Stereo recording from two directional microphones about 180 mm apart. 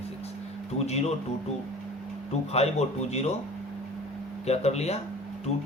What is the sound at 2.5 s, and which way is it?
Speech, 35° left (ahead or behind).